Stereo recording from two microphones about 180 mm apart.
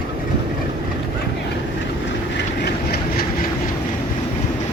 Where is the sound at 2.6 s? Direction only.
60° left (ahead or behind).